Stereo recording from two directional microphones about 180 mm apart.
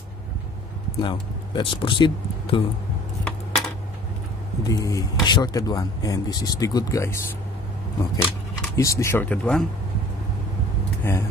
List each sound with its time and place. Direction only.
1.0 s speech: 25° left (ahead or behind)
3.3 s a sound: centre (ahead or behind)
4.6 s speech: 20° left (ahead or behind)
8.7 s speech: 15° left (ahead or behind)
11.1 s speech: 10° left (ahead or behind)